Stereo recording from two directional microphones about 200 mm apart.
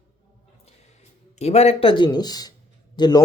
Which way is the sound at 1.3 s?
30° left (ahead or behind).